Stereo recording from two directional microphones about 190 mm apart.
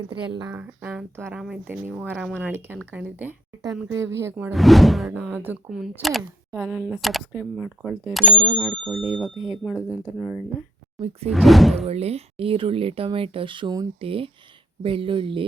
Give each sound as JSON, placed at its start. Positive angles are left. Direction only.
{"t": 0.1, "sound": "speech", "side_deg": -20}
{"t": 0.5, "sound": "speech", "side_deg": -10}
{"t": 4.5, "sound": "speech", "side_deg": 0}
{"t": 11.9, "sound": "speech", "side_deg": -35}